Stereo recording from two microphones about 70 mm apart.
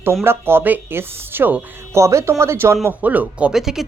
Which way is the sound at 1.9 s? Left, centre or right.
Right.